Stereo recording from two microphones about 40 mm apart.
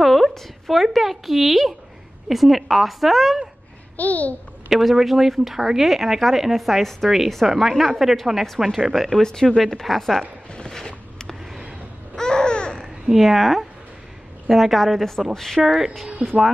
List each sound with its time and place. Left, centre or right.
0.0 s a sound: centre
0.3 s a woman's voice: centre
3.9 s a child's voice: left
4.6 s a woman's voice: centre
7.4 s a woman's voice: centre
7.7 s a woman's voice: centre
8.6 s a woman's voice: centre
9.2 s a woman's voice: centre
10.7 s a sound: centre
12.2 s babbling: centre
13.0 s a woman's voice: centre
15.6 s a woman's voice: centre
16.2 s speech: right